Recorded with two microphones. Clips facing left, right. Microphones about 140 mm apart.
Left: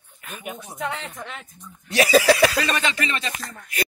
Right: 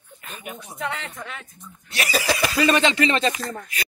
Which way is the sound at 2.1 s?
90° left.